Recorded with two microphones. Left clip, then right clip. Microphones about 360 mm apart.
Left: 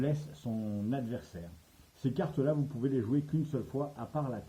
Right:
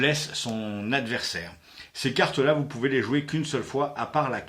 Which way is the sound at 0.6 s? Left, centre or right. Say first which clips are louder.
Right 9 dB; centre.